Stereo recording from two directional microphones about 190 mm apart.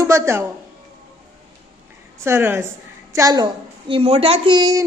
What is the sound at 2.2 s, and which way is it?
Speech, 10° right (ahead or behind).